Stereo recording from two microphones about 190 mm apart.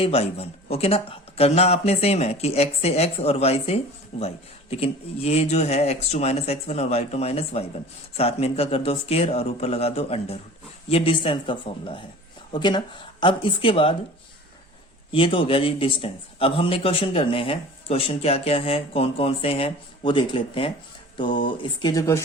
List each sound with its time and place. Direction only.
0.0 s a man's voice: 30° left (ahead or behind)
15.1 s a man's voice: 25° left (ahead or behind)